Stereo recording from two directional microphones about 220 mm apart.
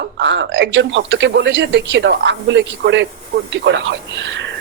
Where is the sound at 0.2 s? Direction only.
55° right (ahead or behind).